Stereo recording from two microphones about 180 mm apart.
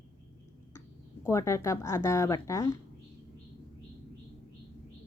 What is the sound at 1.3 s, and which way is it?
A woman's voice, 15° left (ahead or behind).